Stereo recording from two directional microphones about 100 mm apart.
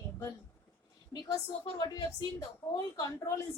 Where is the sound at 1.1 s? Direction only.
45° left (ahead or behind).